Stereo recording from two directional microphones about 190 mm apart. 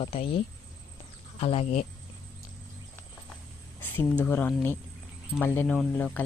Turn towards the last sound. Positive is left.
turn(degrees=10)  # may be behind; listen again after turning